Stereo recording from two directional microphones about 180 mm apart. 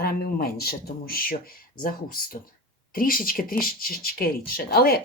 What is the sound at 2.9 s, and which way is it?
Speech, 50° left (ahead or behind).